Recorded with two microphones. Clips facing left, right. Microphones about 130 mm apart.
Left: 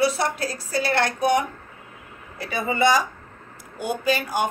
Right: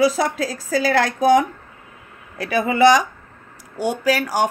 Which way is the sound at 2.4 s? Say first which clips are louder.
Right 6 dB; 90° right.